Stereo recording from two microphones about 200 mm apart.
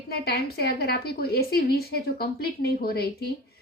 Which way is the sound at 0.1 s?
50° left (ahead or behind).